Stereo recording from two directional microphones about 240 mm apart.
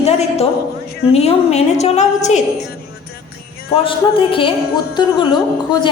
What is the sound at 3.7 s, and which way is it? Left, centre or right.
A woman's voice, left.